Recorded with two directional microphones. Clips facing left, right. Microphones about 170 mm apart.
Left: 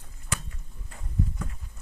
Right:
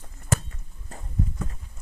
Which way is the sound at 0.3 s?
45° right (ahead or behind).